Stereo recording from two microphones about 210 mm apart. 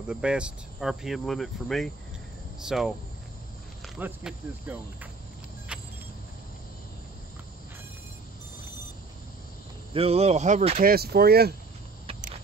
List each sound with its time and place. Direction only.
0.0 s speech: 5° right (ahead or behind)
5.7 s vehicle: 5° right (ahead or behind)
9.9 s speech: 30° right (ahead or behind)
10.9 s speech: 45° right (ahead or behind)